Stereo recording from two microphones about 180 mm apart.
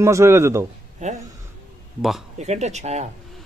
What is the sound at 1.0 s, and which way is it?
Speech, 40° right (ahead or behind).